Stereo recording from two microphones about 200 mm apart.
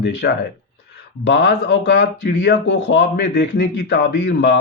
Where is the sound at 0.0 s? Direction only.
55° left (ahead or behind).